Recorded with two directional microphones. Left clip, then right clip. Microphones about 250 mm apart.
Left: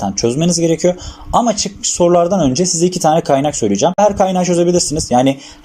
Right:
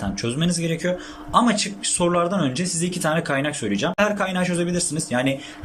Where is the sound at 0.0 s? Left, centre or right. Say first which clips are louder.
Left 10 dB; centre.